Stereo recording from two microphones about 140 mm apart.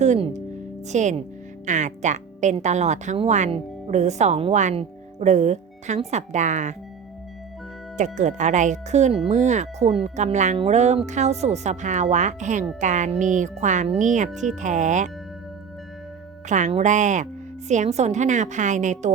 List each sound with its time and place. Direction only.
0.0 s speech: 55° right (ahead or behind)
7.9 s speech: 60° right (ahead or behind)
16.5 s speech: 60° right (ahead or behind)